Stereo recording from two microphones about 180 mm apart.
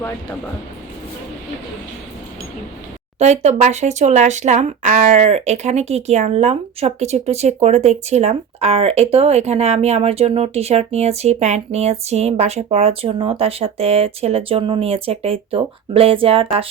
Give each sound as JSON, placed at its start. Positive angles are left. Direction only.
{"t": 3.2, "sound": "speech", "side_deg": -40}